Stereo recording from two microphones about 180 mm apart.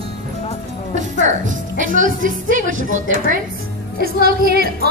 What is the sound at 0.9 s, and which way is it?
Speech, 45° right (ahead or behind).